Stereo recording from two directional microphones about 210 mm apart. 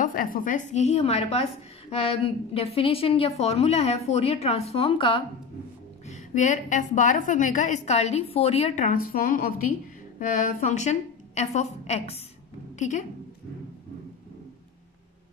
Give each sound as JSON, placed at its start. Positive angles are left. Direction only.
{"t": 0.0, "sound": "a woman's voice", "side_deg": 40}
{"t": 6.0, "sound": "a woman's voice", "side_deg": 35}